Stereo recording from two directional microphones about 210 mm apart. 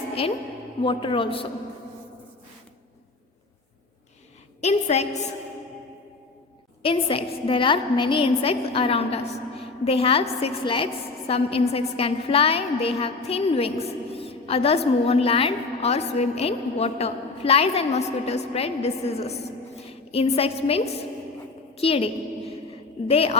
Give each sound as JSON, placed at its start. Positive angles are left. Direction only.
{"t": 0.1, "sound": "a woman's voice", "side_deg": 30}
{"t": 4.6, "sound": "a woman's voice", "side_deg": 30}
{"t": 6.8, "sound": "a woman's voice", "side_deg": 25}